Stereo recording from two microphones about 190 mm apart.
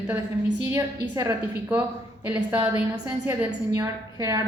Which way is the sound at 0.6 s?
15° right (ahead or behind).